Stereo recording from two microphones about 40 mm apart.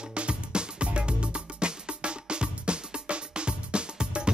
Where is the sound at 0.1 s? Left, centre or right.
Right.